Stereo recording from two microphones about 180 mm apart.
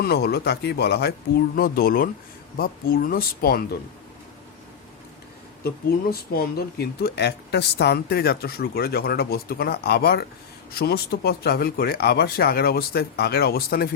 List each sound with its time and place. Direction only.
0.0 s speech: 60° left (ahead or behind)
5.6 s speech: 55° left (ahead or behind)